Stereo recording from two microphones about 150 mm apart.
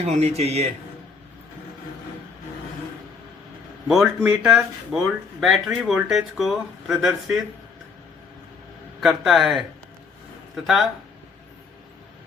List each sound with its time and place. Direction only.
0.0 s a man's voice: 45° right (ahead or behind)
3.8 s speech: 5° right (ahead or behind)
9.0 s speech: centre (ahead or behind)